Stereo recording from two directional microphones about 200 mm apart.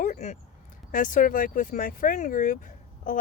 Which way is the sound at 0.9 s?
40° left (ahead or behind).